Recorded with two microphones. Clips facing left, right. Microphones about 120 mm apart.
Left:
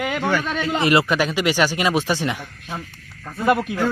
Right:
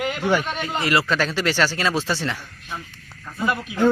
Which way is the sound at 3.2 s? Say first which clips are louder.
Left 6 dB; 55° left (ahead or behind).